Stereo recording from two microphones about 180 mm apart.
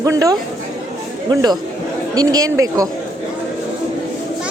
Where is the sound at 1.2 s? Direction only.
25° right (ahead or behind).